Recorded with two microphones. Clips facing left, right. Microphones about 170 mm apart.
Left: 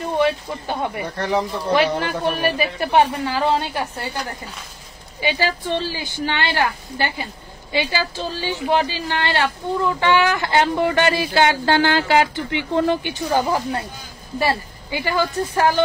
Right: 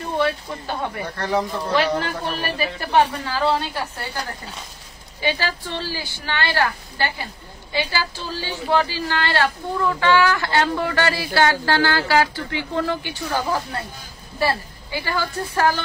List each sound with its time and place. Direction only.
0.2 s a woman's voice: 15° left (ahead or behind)
5.2 s a woman's voice: 15° left (ahead or behind)
8.4 s speech: 15° left (ahead or behind)